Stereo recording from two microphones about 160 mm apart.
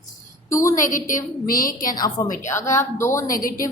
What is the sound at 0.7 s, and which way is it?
A woman's voice, 55° left (ahead or behind).